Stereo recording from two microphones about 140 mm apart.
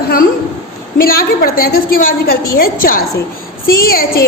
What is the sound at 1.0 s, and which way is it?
A woman's voice, 90° left.